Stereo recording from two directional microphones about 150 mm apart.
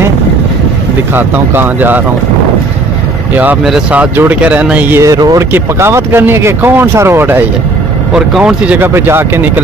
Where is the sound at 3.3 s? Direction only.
10° right (ahead or behind).